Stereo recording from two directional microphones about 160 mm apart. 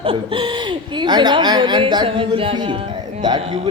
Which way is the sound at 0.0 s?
35° right (ahead or behind).